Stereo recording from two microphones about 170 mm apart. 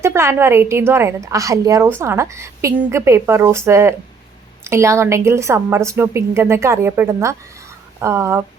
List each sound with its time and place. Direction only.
0.0 s a woman's voice: 15° right (ahead or behind)